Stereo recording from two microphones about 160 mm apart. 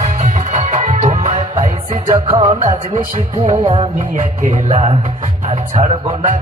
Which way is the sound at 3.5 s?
35° right (ahead or behind).